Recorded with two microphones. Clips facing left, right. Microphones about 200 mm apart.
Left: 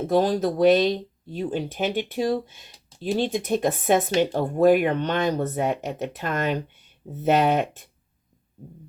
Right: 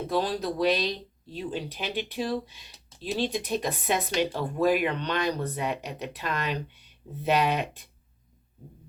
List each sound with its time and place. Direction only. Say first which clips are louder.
0.1 s speech: left 7 dB; 50° left (ahead or behind)